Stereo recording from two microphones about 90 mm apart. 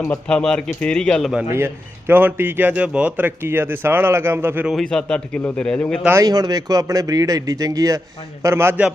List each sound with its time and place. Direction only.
0.0 s speech: 10° left (ahead or behind)
1.5 s a man's voice: 25° right (ahead or behind)
4.7 s speech: 5° left (ahead or behind)
6.2 s speech: 45° right (ahead or behind); by 8.7 s 30° right (ahead or behind)